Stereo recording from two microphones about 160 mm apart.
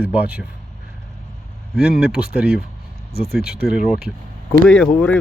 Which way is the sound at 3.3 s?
80° left.